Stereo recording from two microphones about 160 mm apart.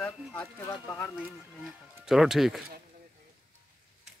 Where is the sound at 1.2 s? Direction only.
5° right (ahead or behind).